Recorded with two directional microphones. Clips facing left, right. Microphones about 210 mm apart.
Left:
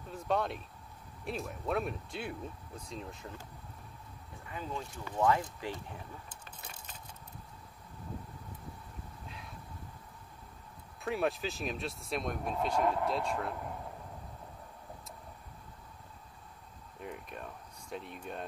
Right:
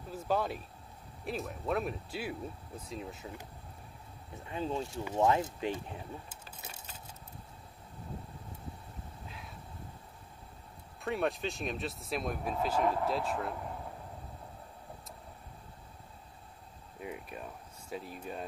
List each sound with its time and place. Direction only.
0.1 s speech: 5° right (ahead or behind)
4.4 s speech: 25° right (ahead or behind)
11.0 s speech: centre (ahead or behind)
17.0 s speech: 5° right (ahead or behind)